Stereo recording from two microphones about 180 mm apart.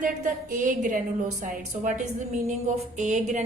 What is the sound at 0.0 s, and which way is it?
A woman's voice, 50° right (ahead or behind).